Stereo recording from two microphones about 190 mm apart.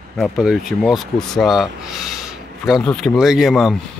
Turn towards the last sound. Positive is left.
turn(degrees=0)  # may be behind; listen again after turning